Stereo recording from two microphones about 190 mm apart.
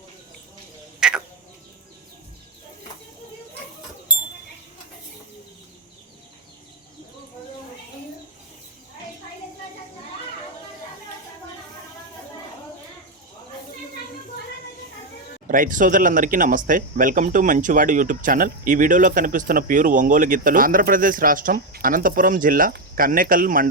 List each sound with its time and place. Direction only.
0.9 s frog: 5° right (ahead or behind)
15.4 s speech: 45° right (ahead or behind)